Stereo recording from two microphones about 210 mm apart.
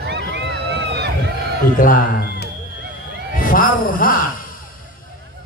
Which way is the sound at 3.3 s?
40° left (ahead or behind).